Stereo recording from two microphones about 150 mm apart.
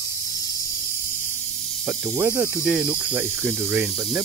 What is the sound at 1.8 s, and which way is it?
Speech, 20° right (ahead or behind).